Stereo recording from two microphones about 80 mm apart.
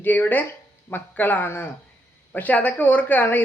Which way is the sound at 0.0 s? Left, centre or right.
Left.